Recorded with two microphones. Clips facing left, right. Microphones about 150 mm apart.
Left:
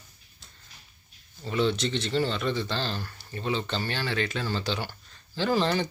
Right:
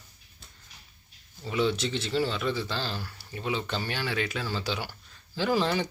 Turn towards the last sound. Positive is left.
turn(degrees=-10)  # may be behind; listen again after turning